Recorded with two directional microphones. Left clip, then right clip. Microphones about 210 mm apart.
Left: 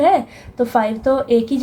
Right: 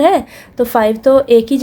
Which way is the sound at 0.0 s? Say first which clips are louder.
Right 3 dB; 50° right (ahead or behind).